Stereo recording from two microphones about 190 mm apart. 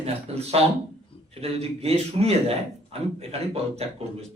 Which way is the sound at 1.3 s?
35° right (ahead or behind).